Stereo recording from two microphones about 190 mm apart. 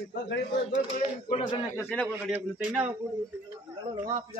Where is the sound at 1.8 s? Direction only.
10° left (ahead or behind).